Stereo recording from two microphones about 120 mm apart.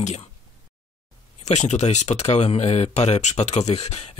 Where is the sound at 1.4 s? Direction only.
70° left (ahead or behind).